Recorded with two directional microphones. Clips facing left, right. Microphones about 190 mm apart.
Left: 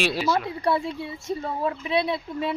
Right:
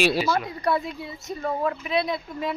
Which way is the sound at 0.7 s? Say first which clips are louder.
Left 1 dB; 30° left (ahead or behind).